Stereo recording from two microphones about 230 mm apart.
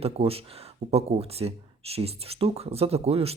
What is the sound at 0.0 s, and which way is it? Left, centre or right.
Speech, right.